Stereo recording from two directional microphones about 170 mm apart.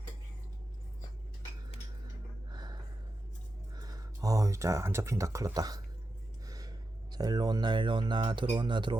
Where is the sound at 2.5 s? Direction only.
25° right (ahead or behind).